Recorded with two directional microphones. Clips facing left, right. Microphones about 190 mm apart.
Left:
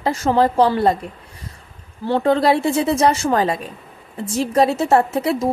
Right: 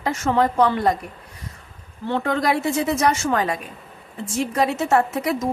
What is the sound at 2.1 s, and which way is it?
A woman's voice, 30° left (ahead or behind).